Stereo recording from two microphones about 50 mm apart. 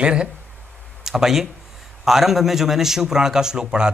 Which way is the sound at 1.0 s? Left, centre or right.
Centre.